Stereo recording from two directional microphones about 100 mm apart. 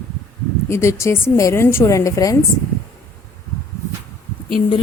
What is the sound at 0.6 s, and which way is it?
A woman's voice, 30° left (ahead or behind).